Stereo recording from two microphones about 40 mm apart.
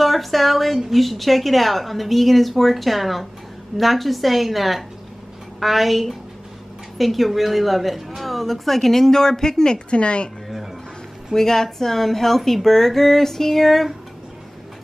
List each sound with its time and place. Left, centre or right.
0.0 s a woman's voice: centre
9.8 s a woman's voice: left
11.3 s speech: centre